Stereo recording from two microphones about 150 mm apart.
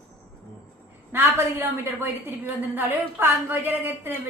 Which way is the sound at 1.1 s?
15° right (ahead or behind).